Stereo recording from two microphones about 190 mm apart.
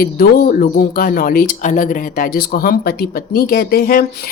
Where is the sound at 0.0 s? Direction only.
50° left (ahead or behind).